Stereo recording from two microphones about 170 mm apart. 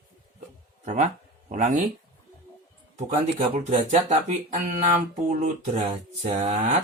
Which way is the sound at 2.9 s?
50° right (ahead or behind).